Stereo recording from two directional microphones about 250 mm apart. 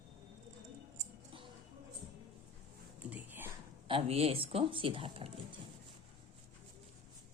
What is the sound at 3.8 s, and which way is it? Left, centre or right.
Speech, right.